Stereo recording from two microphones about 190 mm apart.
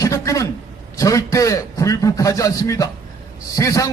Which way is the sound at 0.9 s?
15° left (ahead or behind).